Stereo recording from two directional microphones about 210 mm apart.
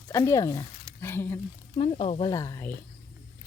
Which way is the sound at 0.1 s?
15° left (ahead or behind).